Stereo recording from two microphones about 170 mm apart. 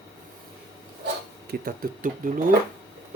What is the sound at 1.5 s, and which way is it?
Speech, 60° right (ahead or behind).